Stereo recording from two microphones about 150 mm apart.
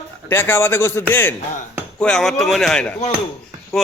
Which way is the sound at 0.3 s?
15° left (ahead or behind).